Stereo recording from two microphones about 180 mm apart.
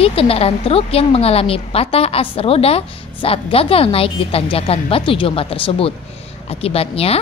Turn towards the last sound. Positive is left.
turn(degrees=35)  # may be behind; listen again after turning